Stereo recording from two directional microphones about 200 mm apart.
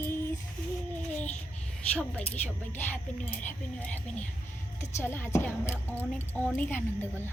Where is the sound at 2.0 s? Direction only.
5° left (ahead or behind).